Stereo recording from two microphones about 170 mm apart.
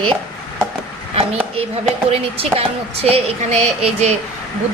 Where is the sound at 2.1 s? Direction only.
35° right (ahead or behind).